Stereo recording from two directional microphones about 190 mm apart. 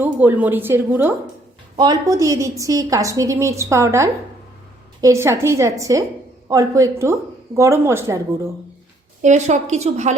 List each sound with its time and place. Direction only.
0.0 s a woman's voice: 10° right (ahead or behind)
1.7 s a woman's voice: 20° right (ahead or behind)
9.2 s a woman's voice: 40° right (ahead or behind)